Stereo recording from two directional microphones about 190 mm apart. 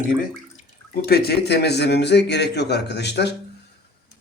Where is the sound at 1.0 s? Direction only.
55° left (ahead or behind).